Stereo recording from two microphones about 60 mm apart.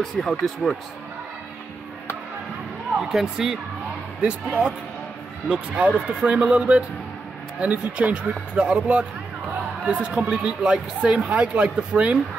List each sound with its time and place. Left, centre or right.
0.0 s speech: centre
3.0 s speech: centre
4.2 s speech: centre